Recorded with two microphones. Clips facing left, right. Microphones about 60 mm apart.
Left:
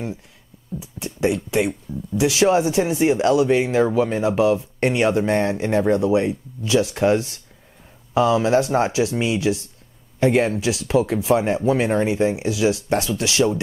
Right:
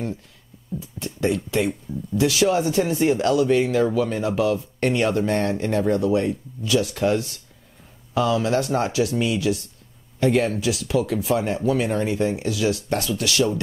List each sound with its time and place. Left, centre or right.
0.7 s speech: centre